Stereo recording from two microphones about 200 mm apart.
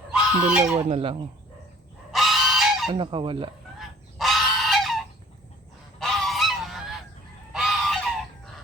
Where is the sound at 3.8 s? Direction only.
Centre (ahead or behind).